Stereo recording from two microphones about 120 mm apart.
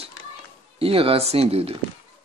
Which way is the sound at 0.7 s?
50° right (ahead or behind).